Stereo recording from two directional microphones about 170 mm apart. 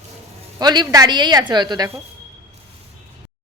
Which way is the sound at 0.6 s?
25° right (ahead or behind).